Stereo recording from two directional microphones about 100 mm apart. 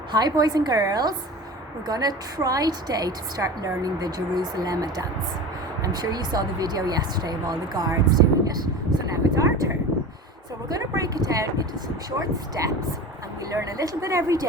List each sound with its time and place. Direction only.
0.1 s a woman's voice: 45° right (ahead or behind)
10.7 s a woman's voice: 40° right (ahead or behind)
13.5 s a woman's voice: 35° right (ahead or behind)